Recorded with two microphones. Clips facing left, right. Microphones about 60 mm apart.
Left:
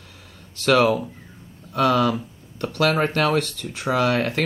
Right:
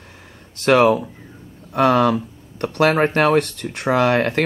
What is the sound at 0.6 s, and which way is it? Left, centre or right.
Speech, right.